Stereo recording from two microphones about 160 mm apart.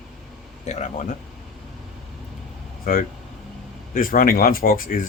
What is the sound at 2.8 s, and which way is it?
Speech, 60° left (ahead or behind).